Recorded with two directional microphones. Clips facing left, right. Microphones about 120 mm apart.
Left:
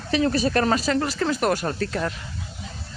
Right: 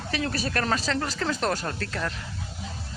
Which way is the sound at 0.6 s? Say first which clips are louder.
Left 5 dB; 10° left (ahead or behind).